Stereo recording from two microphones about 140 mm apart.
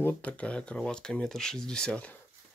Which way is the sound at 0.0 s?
10° left (ahead or behind).